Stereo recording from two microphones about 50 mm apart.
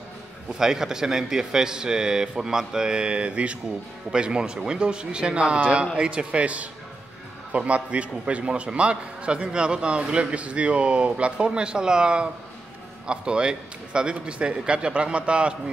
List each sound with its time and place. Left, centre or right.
0.5 s a man's voice: centre